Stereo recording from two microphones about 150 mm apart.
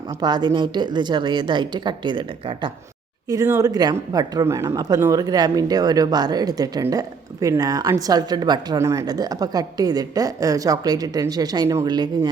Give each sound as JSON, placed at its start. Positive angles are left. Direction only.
{"t": 0.2, "sound": "a woman's voice", "side_deg": -30}
{"t": 3.2, "sound": "speech", "side_deg": -20}